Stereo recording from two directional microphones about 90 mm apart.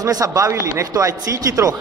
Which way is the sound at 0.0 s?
40° right (ahead or behind).